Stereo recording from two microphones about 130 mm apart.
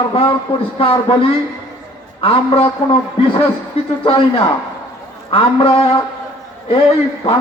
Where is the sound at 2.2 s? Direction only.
45° left (ahead or behind).